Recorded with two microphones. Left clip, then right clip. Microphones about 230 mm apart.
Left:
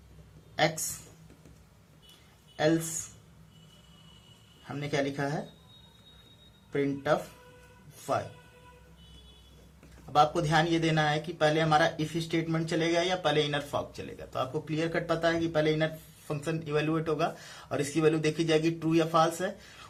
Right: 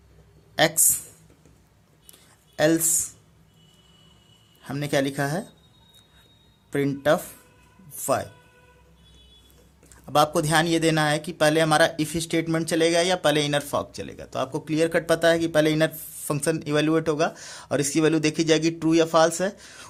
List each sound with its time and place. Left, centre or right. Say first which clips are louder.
0.5 s speech: right 7 dB; right
4.6 s speech: right 7 dB; right
6.7 s speech: right 6 dB; right
10.1 s speech: right 4 dB; right